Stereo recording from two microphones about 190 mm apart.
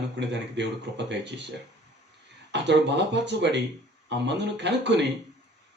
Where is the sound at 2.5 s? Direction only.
65° right (ahead or behind).